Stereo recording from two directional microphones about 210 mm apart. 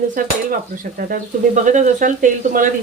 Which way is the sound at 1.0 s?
40° right (ahead or behind).